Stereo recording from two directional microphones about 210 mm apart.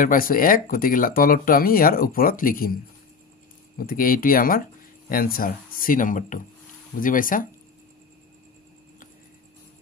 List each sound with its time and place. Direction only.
0.0 s speech: 40° left (ahead or behind)
3.7 s speech: 45° left (ahead or behind)